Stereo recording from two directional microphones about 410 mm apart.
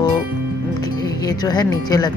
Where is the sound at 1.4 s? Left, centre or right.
Centre.